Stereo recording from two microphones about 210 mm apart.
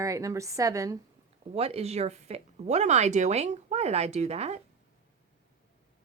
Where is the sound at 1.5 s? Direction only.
30° right (ahead or behind).